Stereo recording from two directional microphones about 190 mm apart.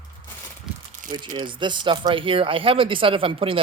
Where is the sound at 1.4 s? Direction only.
25° right (ahead or behind).